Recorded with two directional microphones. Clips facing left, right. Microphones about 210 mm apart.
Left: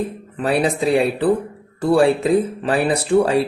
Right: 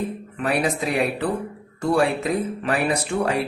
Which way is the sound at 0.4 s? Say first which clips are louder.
Left 5 dB; 30° left (ahead or behind).